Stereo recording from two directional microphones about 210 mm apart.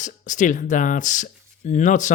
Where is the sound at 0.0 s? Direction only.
35° left (ahead or behind).